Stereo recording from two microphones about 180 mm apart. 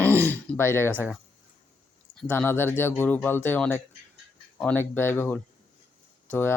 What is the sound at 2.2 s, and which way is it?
Speech, 10° left (ahead or behind).